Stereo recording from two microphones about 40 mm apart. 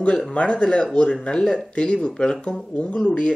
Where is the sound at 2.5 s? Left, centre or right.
Left.